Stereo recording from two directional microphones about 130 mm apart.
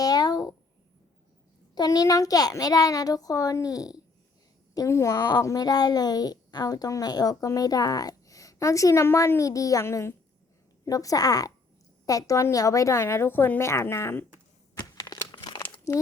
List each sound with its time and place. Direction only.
0.0 s a sound: 30° left (ahead or behind)
1.7 s a child's voice: 30° left (ahead or behind)
14.8 s crumpling: 30° left (ahead or behind)